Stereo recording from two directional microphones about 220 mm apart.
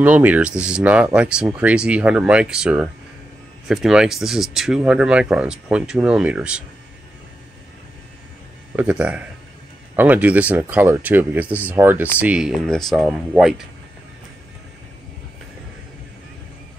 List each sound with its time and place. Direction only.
0.0 s speech: 5° right (ahead or behind)
8.7 s speech: 5° right (ahead or behind)